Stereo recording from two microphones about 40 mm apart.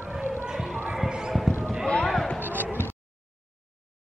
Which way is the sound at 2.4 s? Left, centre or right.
Right.